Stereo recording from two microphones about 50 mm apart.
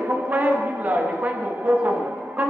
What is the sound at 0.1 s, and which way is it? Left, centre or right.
Speech, right.